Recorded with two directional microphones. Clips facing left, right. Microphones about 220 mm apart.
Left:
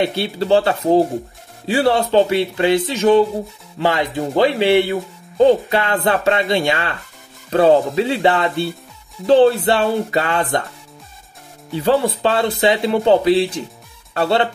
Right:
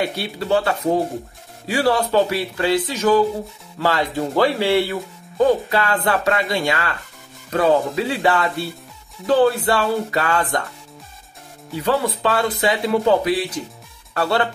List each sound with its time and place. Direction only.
0.0 s speech: 30° left (ahead or behind)
11.7 s speech: 30° left (ahead or behind)